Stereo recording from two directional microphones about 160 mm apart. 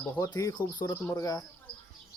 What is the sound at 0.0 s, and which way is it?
Speech, 20° left (ahead or behind).